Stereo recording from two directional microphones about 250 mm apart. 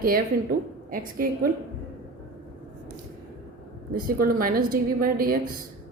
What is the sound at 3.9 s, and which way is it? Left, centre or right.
A woman's voice, right.